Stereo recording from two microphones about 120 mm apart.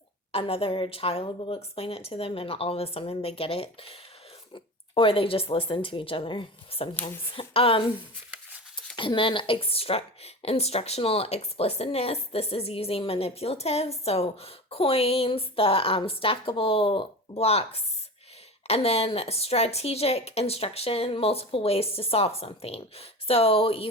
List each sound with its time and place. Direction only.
0.3 s a woman's voice: 55° left (ahead or behind)
9.0 s a woman's voice: 45° left (ahead or behind)